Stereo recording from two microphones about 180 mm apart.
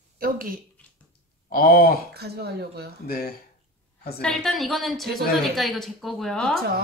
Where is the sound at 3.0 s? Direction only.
60° left (ahead or behind).